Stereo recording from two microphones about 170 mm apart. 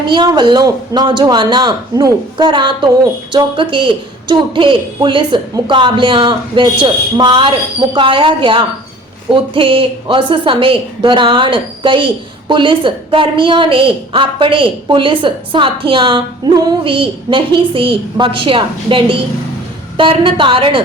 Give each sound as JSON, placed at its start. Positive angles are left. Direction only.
{"t": 0.1, "sound": "a woman's voice", "side_deg": -25}